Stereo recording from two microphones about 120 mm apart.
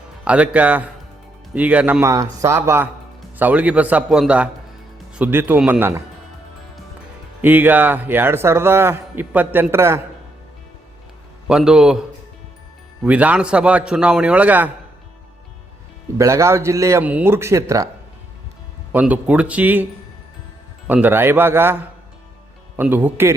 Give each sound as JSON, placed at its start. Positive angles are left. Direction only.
{"t": 0.3, "sound": "speech", "side_deg": -10}
{"t": 2.0, "sound": "speech", "side_deg": -30}
{"t": 7.4, "sound": "speech", "side_deg": -15}
{"t": 11.4, "sound": "a man's voice", "side_deg": -5}
{"t": 13.1, "sound": "speech", "side_deg": -10}
{"t": 16.1, "sound": "speech", "side_deg": -25}
{"t": 17.0, "sound": "speech", "side_deg": -10}
{"t": 18.9, "sound": "speech", "side_deg": -15}
{"t": 22.8, "sound": "speech", "side_deg": -15}